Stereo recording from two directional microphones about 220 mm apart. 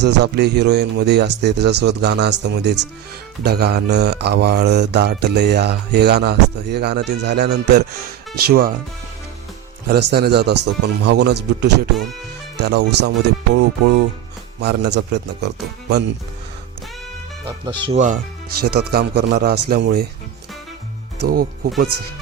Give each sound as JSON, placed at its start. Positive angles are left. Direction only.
{"t": 0.0, "sound": "speech", "side_deg": -50}
{"t": 9.8, "sound": "speech", "side_deg": -45}
{"t": 14.6, "sound": "speech", "side_deg": -50}
{"t": 17.4, "sound": "speech", "side_deg": -20}
{"t": 18.6, "sound": "speech", "side_deg": -45}
{"t": 21.2, "sound": "speech", "side_deg": -45}